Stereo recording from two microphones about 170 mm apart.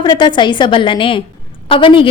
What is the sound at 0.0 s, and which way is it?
A woman's voice, 25° left (ahead or behind).